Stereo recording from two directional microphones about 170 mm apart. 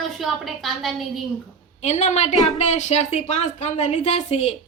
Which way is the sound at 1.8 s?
40° left (ahead or behind).